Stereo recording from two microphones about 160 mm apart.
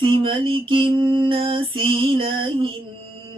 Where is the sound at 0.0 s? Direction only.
30° right (ahead or behind).